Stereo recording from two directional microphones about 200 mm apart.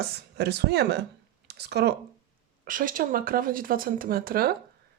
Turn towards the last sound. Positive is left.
turn(degrees=-50)  # may be behind; listen again after turning